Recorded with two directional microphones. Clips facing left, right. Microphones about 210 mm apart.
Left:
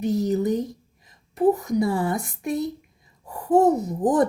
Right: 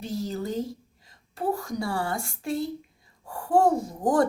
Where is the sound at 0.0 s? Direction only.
20° left (ahead or behind).